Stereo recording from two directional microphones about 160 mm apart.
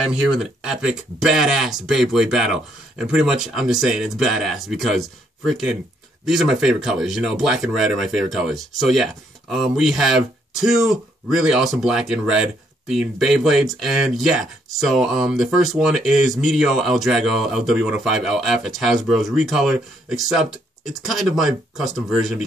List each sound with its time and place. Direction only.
0.1 s speech: 5° right (ahead or behind)